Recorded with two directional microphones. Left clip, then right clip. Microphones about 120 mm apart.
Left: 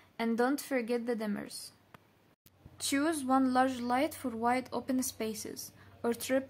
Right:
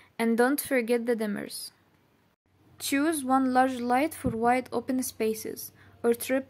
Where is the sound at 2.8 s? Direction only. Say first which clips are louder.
Right 4 dB; 30° right (ahead or behind).